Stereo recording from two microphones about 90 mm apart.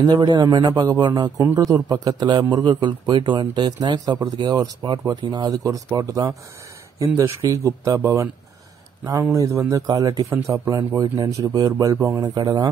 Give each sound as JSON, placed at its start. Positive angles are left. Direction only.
{"t": 0.0, "sound": "a man's voice", "side_deg": -50}
{"t": 1.4, "sound": "a man's voice", "side_deg": -35}
{"t": 10.3, "sound": "speech", "side_deg": -35}
{"t": 10.7, "sound": "a man's voice", "side_deg": -45}
{"t": 12.2, "sound": "a man's voice", "side_deg": -55}